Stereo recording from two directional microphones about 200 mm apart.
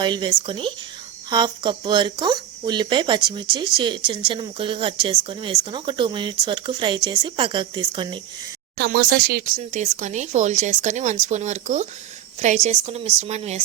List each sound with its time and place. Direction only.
0.0 s speech: 20° right (ahead or behind)
8.8 s speech: 50° right (ahead or behind)
9.6 s speech: 35° right (ahead or behind)